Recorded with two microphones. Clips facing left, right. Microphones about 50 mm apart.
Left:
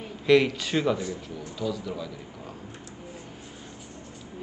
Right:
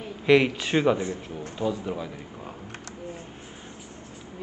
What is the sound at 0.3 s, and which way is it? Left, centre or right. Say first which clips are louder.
A man's voice: right 1 dB; centre.